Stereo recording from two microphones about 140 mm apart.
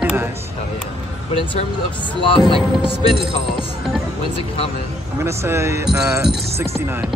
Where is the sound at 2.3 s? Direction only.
40° left (ahead or behind).